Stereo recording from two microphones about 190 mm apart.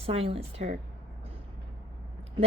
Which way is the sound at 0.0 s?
30° right (ahead or behind).